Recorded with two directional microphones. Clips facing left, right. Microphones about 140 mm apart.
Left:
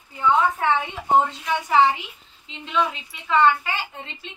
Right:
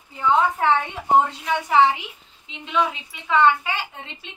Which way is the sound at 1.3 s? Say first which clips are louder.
Even; 10° right (ahead or behind).